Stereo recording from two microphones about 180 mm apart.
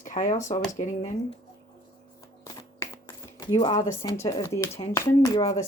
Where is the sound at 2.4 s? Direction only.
15° left (ahead or behind).